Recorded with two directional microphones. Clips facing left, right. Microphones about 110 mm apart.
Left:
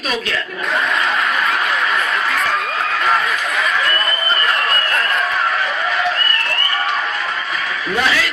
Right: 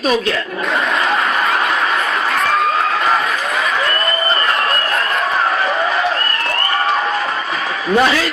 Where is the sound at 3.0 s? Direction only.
Centre (ahead or behind).